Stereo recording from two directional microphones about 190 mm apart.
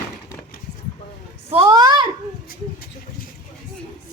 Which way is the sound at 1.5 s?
20° right (ahead or behind).